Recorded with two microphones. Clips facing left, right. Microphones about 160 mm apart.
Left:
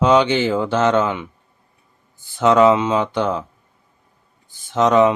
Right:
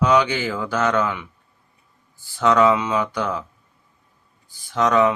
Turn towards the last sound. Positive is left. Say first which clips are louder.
# left 4 dB
turn(degrees=20)  # may be behind; listen again after turning